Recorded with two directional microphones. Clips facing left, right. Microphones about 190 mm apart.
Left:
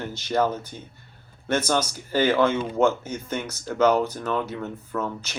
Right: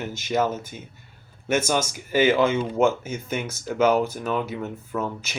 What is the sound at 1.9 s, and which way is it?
Speech, 10° right (ahead or behind).